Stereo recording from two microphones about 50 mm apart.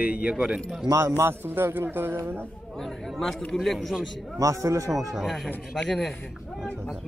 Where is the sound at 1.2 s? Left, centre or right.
Right.